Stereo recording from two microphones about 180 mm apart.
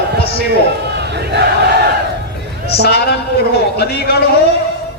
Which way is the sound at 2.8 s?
65° left (ahead or behind).